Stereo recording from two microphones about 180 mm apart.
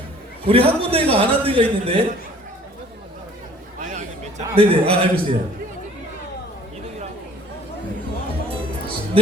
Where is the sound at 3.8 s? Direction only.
40° right (ahead or behind).